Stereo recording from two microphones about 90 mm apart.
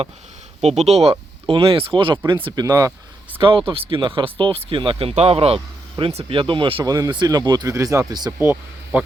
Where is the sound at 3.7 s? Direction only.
85° right.